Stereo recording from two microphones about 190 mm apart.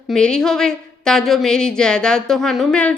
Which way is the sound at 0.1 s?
5° left (ahead or behind).